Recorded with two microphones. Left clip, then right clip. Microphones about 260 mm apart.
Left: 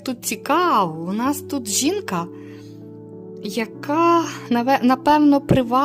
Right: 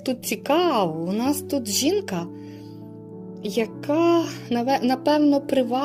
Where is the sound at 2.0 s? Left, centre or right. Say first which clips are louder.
Left 5 dB; left.